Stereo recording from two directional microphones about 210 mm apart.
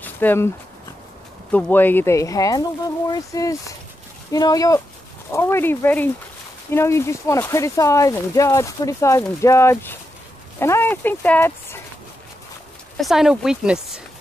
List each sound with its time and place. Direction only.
0.0 s a sound: 10° left (ahead or behind)
1.5 s speech: 10° left (ahead or behind)
12.9 s speech: centre (ahead or behind)